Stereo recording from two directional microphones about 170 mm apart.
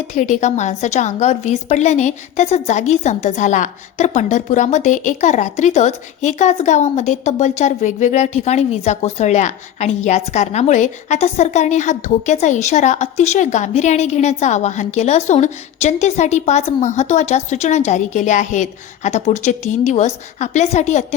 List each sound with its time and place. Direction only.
0.1 s a woman's voice: 45° left (ahead or behind)